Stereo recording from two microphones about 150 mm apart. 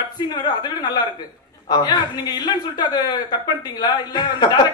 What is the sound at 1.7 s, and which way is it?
A man's voice, 25° left (ahead or behind).